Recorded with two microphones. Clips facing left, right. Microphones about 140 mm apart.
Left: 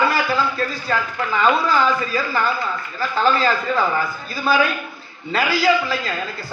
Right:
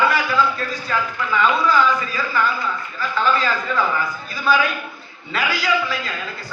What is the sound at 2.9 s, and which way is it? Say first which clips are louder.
Speech: left 2 dB; 35° left (ahead or behind).